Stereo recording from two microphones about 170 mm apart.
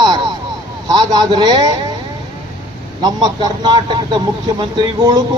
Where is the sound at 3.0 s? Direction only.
25° right (ahead or behind).